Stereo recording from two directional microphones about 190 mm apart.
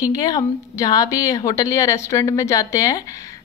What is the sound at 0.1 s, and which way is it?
A woman's voice, 20° left (ahead or behind).